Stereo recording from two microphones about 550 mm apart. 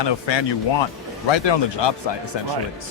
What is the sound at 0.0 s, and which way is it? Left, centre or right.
A man's voice, left.